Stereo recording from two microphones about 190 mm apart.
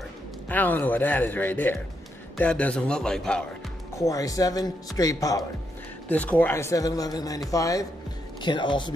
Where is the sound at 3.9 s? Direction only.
15° left (ahead or behind).